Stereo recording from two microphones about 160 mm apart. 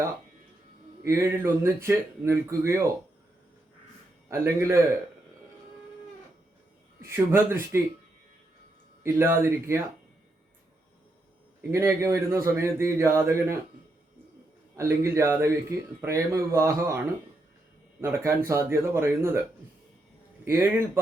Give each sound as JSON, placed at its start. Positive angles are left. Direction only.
{"t": 1.0, "sound": "speech", "side_deg": -15}
{"t": 4.3, "sound": "speech", "side_deg": -15}
{"t": 7.0, "sound": "speech", "side_deg": -15}
{"t": 9.1, "sound": "speech", "side_deg": -15}
{"t": 11.7, "sound": "speech", "side_deg": -15}
{"t": 14.8, "sound": "speech", "side_deg": -15}
{"t": 18.0, "sound": "speech", "side_deg": -15}
{"t": 20.4, "sound": "speech", "side_deg": -15}